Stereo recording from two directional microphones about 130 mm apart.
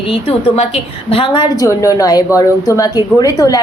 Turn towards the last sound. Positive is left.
turn(degrees=25)  # may be behind; listen again after turning